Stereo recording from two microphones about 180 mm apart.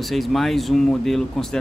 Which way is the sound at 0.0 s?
Centre (ahead or behind).